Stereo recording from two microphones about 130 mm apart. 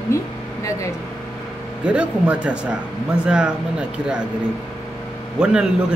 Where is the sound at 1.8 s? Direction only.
10° right (ahead or behind).